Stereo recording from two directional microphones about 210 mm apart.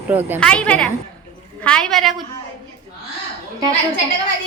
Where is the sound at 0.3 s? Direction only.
5° left (ahead or behind).